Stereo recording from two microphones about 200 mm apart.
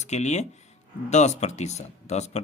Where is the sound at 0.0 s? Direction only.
35° left (ahead or behind).